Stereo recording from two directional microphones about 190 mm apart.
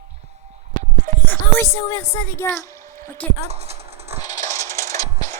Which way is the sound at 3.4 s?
35° right (ahead or behind).